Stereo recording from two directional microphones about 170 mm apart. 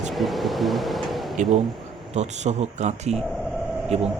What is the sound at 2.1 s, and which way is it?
A man's voice, 40° right (ahead or behind).